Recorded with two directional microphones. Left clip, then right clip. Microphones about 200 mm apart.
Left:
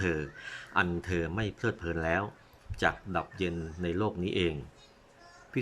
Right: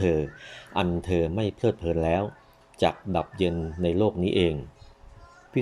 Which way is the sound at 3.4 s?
Centre (ahead or behind).